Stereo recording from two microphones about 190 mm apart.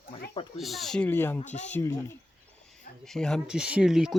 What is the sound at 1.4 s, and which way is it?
Speech, 35° left (ahead or behind).